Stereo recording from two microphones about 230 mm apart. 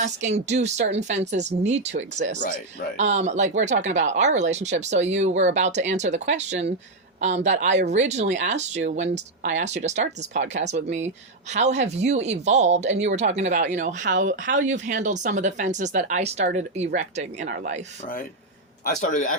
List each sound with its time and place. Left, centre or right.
0.2 s speech: right
3.0 s speech: right
18.9 s a man's voice: left